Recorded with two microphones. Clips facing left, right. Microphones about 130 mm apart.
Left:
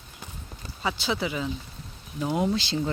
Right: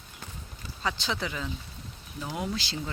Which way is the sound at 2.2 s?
25° left (ahead or behind).